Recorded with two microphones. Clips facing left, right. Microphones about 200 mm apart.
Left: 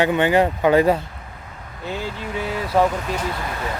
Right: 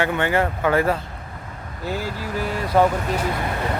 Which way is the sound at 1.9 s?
Centre (ahead or behind).